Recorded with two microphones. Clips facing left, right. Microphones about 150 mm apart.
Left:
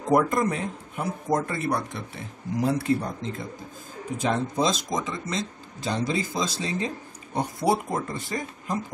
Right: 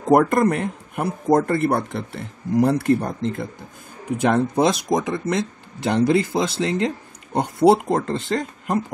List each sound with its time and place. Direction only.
0.1 s speech: 65° right (ahead or behind)
7.3 s speech: 80° right